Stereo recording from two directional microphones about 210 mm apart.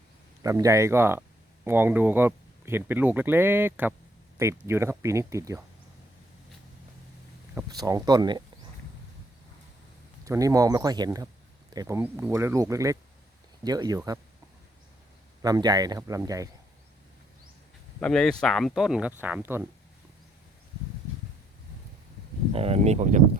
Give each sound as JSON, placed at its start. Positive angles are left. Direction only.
{"t": 0.4, "sound": "speech", "side_deg": -15}
{"t": 7.5, "sound": "speech", "side_deg": -15}
{"t": 10.2, "sound": "speech", "side_deg": -15}
{"t": 15.4, "sound": "speech", "side_deg": -15}
{"t": 18.0, "sound": "speech", "side_deg": 5}
{"t": 22.5, "sound": "speech", "side_deg": -30}